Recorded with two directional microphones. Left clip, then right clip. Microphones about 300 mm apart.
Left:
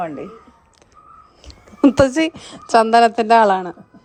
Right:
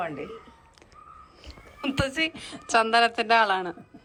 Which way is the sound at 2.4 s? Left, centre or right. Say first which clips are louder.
Left 9 dB; centre.